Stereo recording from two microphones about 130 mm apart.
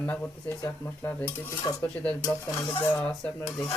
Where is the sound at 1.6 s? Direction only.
25° left (ahead or behind).